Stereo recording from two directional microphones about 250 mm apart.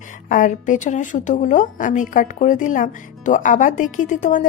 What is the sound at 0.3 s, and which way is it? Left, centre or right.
Speech, left.